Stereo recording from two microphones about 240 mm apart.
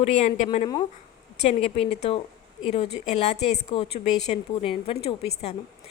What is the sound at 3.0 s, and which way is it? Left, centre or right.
A woman's voice, left.